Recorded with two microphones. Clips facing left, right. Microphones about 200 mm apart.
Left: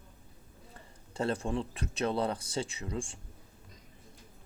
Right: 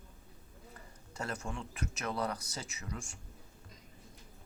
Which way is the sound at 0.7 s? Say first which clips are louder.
Left 8 dB; 30° left (ahead or behind).